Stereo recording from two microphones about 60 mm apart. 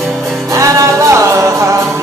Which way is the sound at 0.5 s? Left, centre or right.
Right.